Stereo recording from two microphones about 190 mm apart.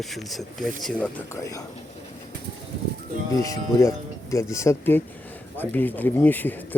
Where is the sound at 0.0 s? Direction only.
Centre (ahead or behind); by 1.6 s 15° left (ahead or behind).